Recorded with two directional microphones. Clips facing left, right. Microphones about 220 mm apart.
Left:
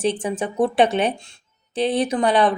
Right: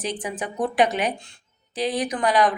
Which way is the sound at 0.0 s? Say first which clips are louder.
Left 7 dB; 30° left (ahead or behind).